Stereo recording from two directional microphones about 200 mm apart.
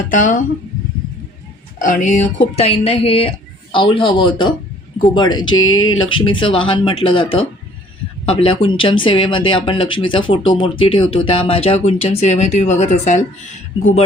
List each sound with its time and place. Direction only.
0.1 s speech: 40° left (ahead or behind)
1.8 s speech: 40° left (ahead or behind); by 5.5 s 20° left (ahead or behind)
5.5 s speech: 90° left
6.0 s speech: 25° left (ahead or behind)